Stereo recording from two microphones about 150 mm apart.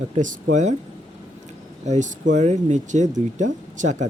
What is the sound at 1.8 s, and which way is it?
Speech, 55° right (ahead or behind).